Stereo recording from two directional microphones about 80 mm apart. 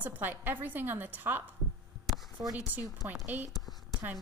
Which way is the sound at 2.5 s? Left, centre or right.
Right.